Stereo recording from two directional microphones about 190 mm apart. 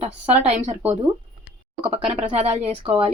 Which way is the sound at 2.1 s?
35° right (ahead or behind).